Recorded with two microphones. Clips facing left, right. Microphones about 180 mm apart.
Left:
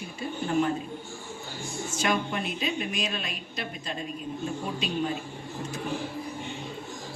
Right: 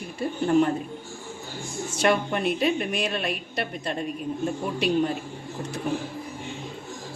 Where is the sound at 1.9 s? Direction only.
65° right (ahead or behind).